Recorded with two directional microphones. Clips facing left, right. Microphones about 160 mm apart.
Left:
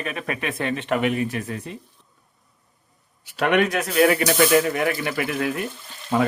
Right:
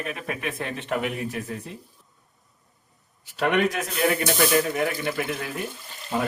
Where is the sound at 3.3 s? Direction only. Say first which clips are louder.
Left 3 dB; 80° left.